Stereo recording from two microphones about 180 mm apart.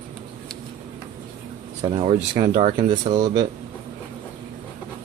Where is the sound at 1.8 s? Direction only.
30° right (ahead or behind).